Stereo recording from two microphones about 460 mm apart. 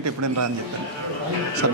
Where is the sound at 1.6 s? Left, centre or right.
Right.